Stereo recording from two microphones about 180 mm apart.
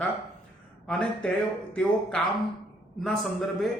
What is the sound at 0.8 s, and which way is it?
Speech, 5° left (ahead or behind).